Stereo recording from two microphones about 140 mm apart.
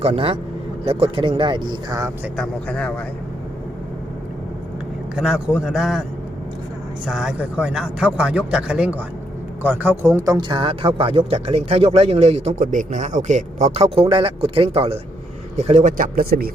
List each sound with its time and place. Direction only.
0.0 s a man's voice: 45° right (ahead or behind); by 2.1 s 25° right (ahead or behind)
2.3 s speech: 5° left (ahead or behind)
5.1 s a man's voice: 5° right (ahead or behind); by 10.4 s 20° right (ahead or behind)
10.5 s a man's voice: 40° right (ahead or behind)
12.5 s a man's voice: 70° right (ahead or behind); by 15.9 s 50° right (ahead or behind)
15.9 s speech: 75° right (ahead or behind)